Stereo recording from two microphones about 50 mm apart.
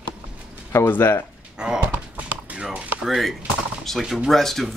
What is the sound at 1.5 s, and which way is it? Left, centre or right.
Speech, centre.